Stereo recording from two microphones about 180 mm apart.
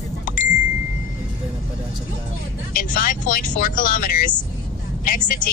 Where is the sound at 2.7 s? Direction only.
50° left (ahead or behind).